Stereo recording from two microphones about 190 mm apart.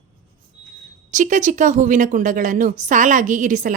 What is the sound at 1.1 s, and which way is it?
Speech, 40° right (ahead or behind).